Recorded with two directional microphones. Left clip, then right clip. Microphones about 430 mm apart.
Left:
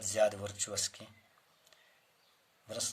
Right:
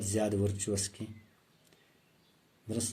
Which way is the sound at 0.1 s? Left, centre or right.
Centre.